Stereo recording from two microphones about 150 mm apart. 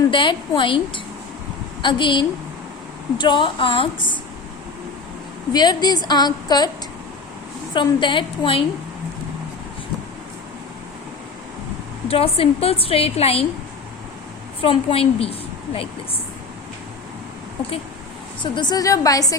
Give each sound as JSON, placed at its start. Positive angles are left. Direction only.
{"t": 0.1, "sound": "a woman's voice", "side_deg": 35}
{"t": 5.5, "sound": "a woman's voice", "side_deg": 30}
{"t": 7.7, "sound": "a woman's voice", "side_deg": 30}
{"t": 12.0, "sound": "a woman's voice", "side_deg": 40}
{"t": 14.6, "sound": "a woman's voice", "side_deg": 40}
{"t": 18.5, "sound": "a woman's voice", "side_deg": 30}